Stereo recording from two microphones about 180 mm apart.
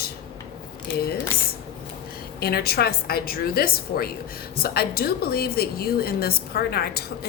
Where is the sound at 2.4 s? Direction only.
60° left (ahead or behind).